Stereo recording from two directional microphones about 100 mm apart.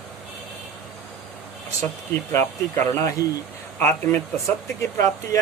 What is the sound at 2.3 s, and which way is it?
Speech, 25° left (ahead or behind).